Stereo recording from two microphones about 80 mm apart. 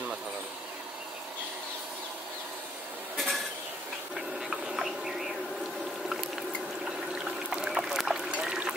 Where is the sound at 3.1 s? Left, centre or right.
Centre.